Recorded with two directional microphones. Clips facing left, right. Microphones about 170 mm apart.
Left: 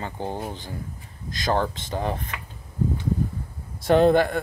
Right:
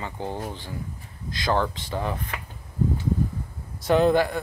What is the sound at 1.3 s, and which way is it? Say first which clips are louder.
Speech: even; 45° left (ahead or behind).